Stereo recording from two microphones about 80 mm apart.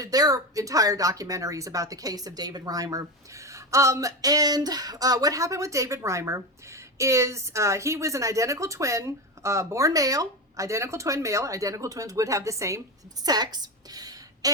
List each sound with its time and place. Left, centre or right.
0.0 s a woman's voice: right
13.2 s a woman's voice: right